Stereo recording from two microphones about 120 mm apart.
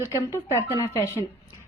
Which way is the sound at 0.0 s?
25° left (ahead or behind).